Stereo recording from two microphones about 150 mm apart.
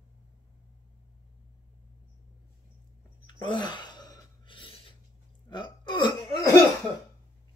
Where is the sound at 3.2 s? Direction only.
30° left (ahead or behind).